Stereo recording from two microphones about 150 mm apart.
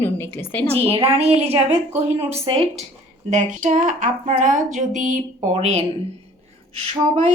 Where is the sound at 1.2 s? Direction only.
45° right (ahead or behind).